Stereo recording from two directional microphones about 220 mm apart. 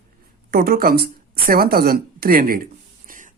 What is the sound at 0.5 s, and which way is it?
A woman's voice, 40° right (ahead or behind).